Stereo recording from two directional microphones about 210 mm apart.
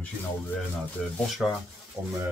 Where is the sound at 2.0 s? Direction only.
15° right (ahead or behind).